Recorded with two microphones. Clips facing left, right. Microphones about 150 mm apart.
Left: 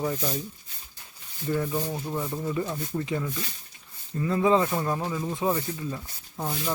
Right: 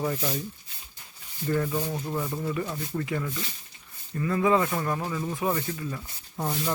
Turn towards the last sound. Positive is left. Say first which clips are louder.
# right 1 dB
turn(degrees=0)  # may be behind; listen again after turning